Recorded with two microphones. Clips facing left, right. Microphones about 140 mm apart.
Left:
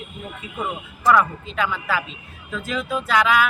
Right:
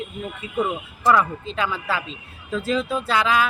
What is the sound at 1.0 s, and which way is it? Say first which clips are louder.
Speech: left 1 dB; 25° right (ahead or behind).